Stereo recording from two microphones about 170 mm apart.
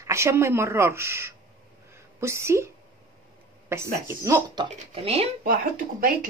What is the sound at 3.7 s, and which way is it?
Speech, 15° right (ahead or behind).